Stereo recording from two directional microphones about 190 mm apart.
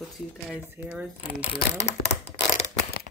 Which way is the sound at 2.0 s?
80° left.